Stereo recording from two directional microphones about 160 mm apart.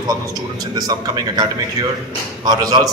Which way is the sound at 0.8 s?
25° right (ahead or behind).